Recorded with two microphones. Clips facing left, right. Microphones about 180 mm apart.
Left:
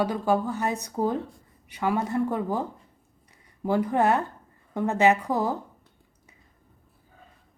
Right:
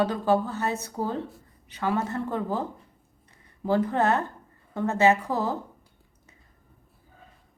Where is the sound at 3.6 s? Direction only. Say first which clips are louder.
Left 1 dB; 15° left (ahead or behind).